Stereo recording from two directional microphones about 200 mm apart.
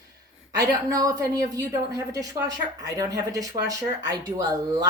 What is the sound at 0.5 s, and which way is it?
Speech, 15° right (ahead or behind).